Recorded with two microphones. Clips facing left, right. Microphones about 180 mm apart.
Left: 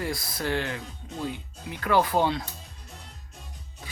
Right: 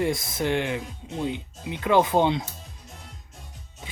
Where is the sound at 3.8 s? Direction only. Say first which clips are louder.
Right 2 dB; 20° right (ahead or behind).